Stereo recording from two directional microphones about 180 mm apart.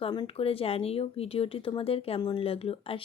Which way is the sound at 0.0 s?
30° left (ahead or behind).